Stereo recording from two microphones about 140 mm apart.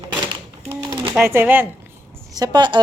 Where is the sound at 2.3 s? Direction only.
30° right (ahead or behind).